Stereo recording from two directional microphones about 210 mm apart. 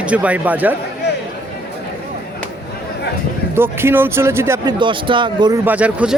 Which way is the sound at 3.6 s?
10° right (ahead or behind).